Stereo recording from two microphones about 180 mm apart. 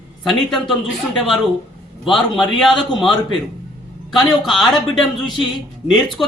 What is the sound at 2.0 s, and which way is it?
A man's voice, centre (ahead or behind).